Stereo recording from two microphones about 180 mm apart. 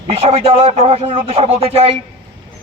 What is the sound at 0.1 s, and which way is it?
A man's voice, 35° right (ahead or behind).